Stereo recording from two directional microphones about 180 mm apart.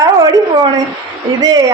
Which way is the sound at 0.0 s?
20° right (ahead or behind).